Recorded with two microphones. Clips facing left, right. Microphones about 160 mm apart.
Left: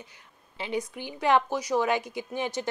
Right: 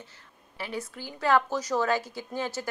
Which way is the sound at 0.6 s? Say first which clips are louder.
Left 4 dB; 20° left (ahead or behind).